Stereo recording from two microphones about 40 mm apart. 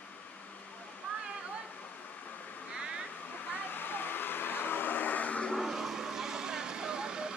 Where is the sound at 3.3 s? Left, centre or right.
Left.